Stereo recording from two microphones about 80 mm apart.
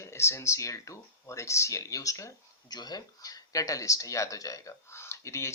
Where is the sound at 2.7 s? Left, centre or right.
Left.